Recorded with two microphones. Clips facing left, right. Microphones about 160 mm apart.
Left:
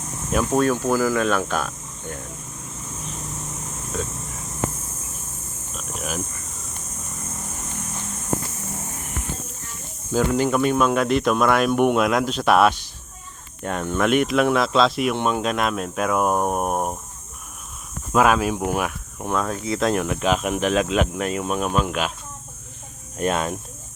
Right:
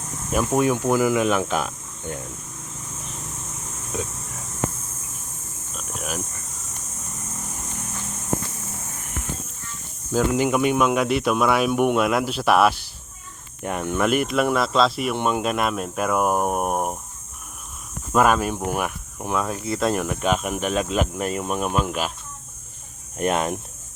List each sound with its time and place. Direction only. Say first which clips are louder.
0.3 s speech: left 1 dB; 10° right (ahead or behind)
5.7 s a sound: left 1 dB; centre (ahead or behind)
10.3 s speech: left 1 dB; 15° right (ahead or behind)
18.1 s speech: left 1 dB; centre (ahead or behind)
23.1 s speech: right 1 dB; 20° right (ahead or behind)